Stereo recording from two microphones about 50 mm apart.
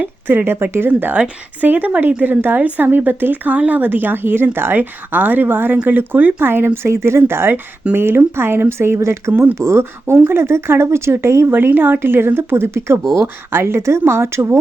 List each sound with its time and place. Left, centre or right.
0.3 s speech: right
2.8 s speech: right
4.8 s speech: right
6.8 s speech: right
7.2 s speech: right
9.0 s speech: right
9.3 s speech: right
9.6 s speech: right
11.5 s speech: right
11.9 s speech: right